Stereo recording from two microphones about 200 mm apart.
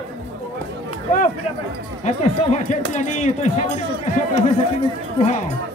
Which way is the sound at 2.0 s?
35° left (ahead or behind).